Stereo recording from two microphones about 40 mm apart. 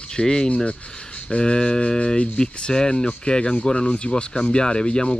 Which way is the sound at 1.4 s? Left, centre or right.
Left.